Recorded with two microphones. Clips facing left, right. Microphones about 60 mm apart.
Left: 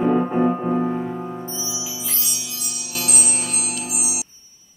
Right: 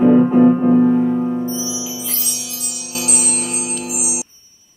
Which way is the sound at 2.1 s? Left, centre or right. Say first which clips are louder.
Right 2 dB; left.